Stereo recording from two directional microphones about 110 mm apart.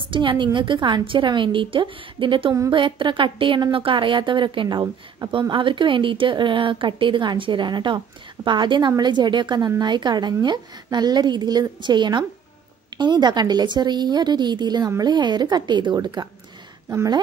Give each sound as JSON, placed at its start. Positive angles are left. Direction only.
{"t": 0.1, "sound": "a woman's voice", "side_deg": -50}